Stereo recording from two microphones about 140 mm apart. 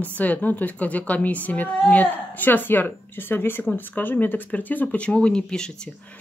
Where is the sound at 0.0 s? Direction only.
10° left (ahead or behind).